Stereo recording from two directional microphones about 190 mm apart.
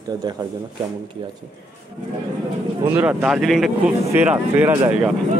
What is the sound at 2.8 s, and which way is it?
Speech, 10° right (ahead or behind).